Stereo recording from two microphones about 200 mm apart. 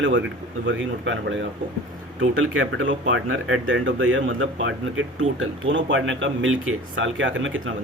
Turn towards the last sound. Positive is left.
turn(degrees=-75)  # may be behind; listen again after turning